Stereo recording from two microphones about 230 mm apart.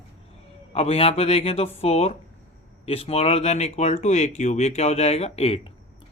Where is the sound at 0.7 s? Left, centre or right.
Left.